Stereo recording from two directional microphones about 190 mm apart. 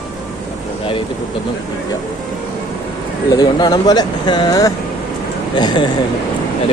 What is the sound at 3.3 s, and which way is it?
Speech, 20° left (ahead or behind).